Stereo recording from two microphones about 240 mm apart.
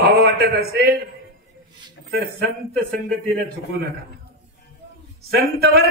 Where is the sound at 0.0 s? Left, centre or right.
Right.